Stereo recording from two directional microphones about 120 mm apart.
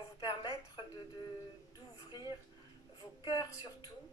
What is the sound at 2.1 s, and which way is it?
A woman's voice, 35° left (ahead or behind).